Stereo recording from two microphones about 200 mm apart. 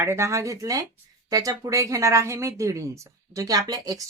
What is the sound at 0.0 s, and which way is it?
Speech, 15° right (ahead or behind).